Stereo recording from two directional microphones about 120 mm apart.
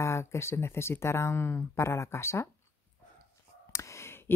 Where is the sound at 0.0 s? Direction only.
25° left (ahead or behind).